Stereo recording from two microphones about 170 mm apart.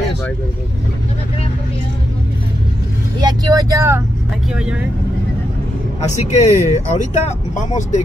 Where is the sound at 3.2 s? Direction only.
20° right (ahead or behind).